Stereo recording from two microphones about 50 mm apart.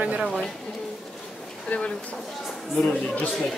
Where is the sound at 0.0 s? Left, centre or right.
Right.